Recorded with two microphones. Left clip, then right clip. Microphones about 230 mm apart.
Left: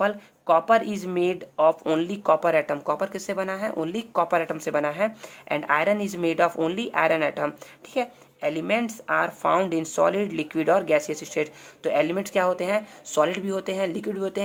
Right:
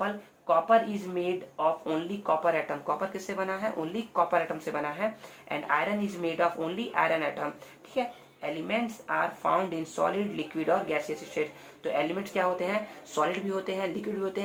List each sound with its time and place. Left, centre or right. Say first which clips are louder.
0.0 s speech: left 8 dB; left